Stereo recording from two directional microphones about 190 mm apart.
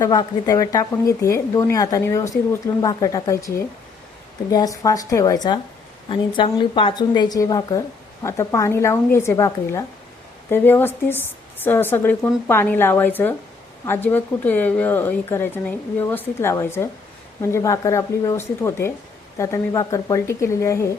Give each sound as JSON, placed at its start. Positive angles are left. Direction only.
{"t": 0.0, "sound": "a woman's voice", "side_deg": 20}